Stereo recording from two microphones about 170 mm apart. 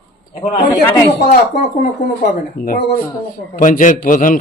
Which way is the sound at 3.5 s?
50° left (ahead or behind).